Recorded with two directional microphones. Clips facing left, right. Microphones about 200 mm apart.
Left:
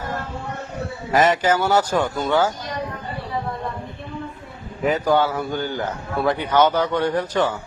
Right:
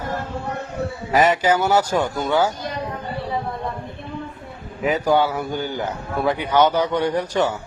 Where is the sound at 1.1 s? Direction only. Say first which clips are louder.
Even; 10° right (ahead or behind).